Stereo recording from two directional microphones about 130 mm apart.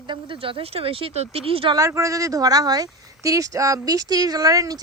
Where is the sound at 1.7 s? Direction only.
25° right (ahead or behind).